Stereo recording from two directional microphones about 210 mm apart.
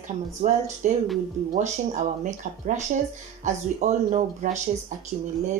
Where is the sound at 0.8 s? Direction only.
35° right (ahead or behind).